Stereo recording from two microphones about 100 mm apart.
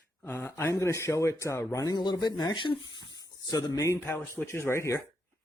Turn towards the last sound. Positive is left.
turn(degrees=25)  # may be behind; listen again after turning